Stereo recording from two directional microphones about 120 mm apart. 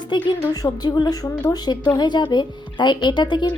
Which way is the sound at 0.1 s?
35° left (ahead or behind).